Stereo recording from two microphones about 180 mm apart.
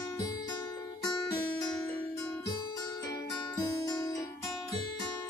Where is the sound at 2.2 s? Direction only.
20° left (ahead or behind).